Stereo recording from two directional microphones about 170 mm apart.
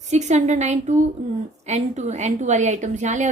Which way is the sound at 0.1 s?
45° right (ahead or behind).